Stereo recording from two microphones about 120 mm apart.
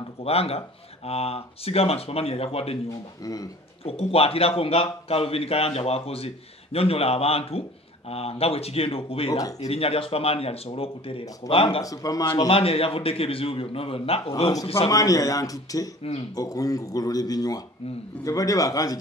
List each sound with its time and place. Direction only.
0.2 s a man's voice: 55° left (ahead or behind)
3.2 s a man's voice: 30° left (ahead or behind)
3.8 s a man's voice: 55° left (ahead or behind)
11.8 s speech: 30° left (ahead or behind)
12.4 s a man's voice: 50° left (ahead or behind)
14.9 s speech: 30° left (ahead or behind)
16.0 s a man's voice: 55° left (ahead or behind)
16.3 s a man's voice: 30° left (ahead or behind)